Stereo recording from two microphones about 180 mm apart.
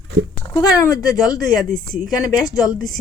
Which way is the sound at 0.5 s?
20° left (ahead or behind).